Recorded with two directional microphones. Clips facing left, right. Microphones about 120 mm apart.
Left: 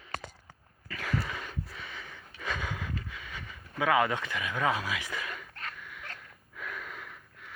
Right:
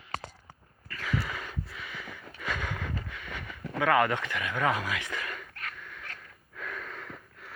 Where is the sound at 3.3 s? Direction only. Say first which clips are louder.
Right 4 dB; 65° right (ahead or behind).